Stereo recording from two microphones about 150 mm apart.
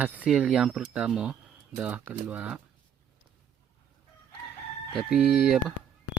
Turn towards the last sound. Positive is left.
turn(degrees=-5)  # may be behind; listen again after turning